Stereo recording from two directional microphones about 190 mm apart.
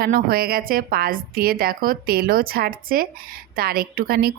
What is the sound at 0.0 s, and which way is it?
A woman's voice, 50° right (ahead or behind).